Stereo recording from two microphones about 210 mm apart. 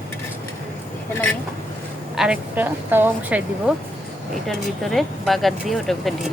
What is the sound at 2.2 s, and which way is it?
Speech, 5° right (ahead or behind).